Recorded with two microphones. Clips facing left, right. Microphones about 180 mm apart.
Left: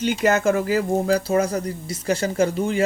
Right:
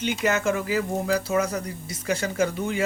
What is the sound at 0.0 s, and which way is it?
Speech, 40° left (ahead or behind).